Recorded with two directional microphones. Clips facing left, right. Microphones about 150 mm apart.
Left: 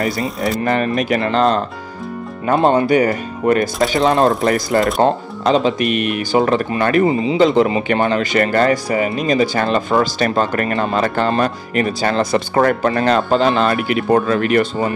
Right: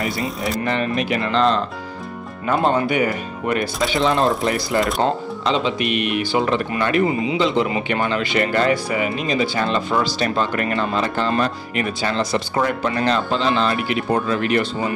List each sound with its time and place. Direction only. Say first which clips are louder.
0.2 s speech: left 4 dB; centre (ahead or behind)
0.7 s speech: left 4 dB; 45° left (ahead or behind)
2.9 s speech: left 6 dB; 40° left (ahead or behind)